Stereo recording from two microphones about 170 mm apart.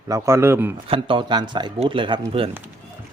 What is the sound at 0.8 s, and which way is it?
Speech, 30° right (ahead or behind).